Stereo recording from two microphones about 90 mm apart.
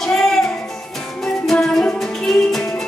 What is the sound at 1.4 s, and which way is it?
Music, 5° left (ahead or behind).